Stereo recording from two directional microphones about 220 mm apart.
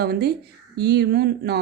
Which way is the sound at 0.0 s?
45° right (ahead or behind).